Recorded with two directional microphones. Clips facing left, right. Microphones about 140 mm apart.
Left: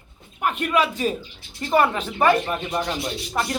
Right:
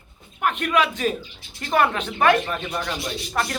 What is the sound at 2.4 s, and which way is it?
Speech, 20° left (ahead or behind).